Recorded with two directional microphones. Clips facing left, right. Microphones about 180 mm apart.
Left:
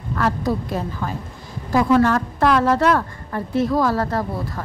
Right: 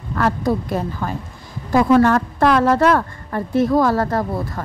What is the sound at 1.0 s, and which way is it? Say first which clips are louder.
A woman's voice: right 2 dB; 55° right (ahead or behind).